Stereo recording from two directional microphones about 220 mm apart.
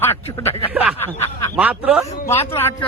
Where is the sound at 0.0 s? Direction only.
10° left (ahead or behind).